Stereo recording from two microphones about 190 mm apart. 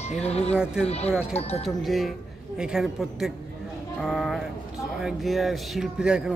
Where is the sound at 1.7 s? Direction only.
Centre (ahead or behind).